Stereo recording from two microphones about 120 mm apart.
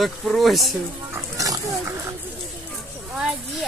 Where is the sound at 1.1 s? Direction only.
25° right (ahead or behind).